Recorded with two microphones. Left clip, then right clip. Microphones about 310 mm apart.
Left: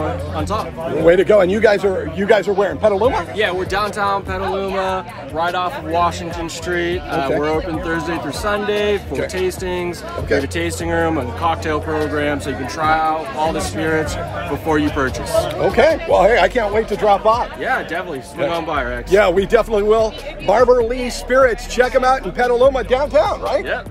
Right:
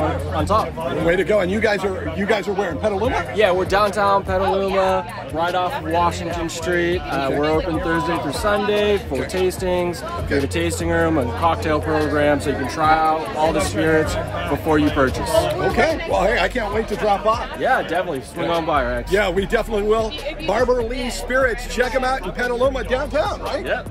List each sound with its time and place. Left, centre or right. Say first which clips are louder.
0.4 s speech: right 4 dB; centre
1.0 s speech: left 7 dB; centre
3.3 s speech: right 2 dB; centre
15.6 s speech: left 5 dB; centre
17.6 s speech: right 6 dB; centre
19.1 s speech: left 7 dB; centre